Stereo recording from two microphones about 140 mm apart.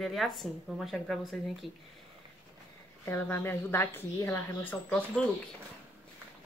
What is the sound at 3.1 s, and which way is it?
A woman's voice, 15° left (ahead or behind).